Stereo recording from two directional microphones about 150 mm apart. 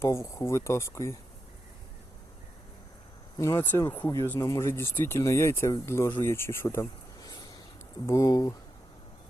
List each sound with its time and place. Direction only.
0.0 s speech: 20° left (ahead or behind)
3.3 s speech: 20° left (ahead or behind)